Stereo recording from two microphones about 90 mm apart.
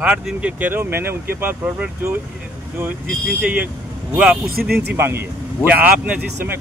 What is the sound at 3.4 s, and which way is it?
Speech, 15° right (ahead or behind).